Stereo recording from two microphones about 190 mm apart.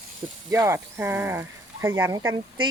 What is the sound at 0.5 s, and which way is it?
Speech, 15° right (ahead or behind).